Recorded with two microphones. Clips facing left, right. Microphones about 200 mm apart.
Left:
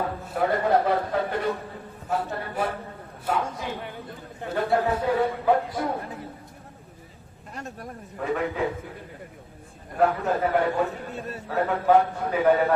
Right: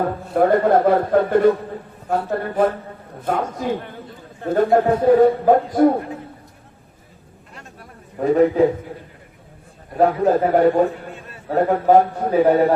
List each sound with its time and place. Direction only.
0.0 s speech: 50° right (ahead or behind)
7.5 s a sound: 45° left (ahead or behind)
8.2 s a man's voice: 40° right (ahead or behind)
10.0 s a man's voice: 40° right (ahead or behind)